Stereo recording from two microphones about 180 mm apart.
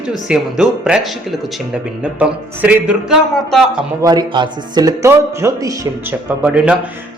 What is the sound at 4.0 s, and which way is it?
Speech, 20° right (ahead or behind).